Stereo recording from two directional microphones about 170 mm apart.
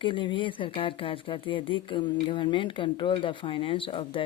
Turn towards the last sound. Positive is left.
turn(degrees=30)  # may be behind; listen again after turning